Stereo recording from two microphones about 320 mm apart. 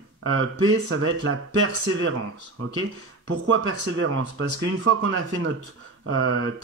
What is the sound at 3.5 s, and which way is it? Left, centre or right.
Speech, right.